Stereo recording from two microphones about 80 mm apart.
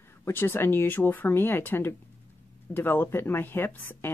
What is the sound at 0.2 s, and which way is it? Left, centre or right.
Speech, left.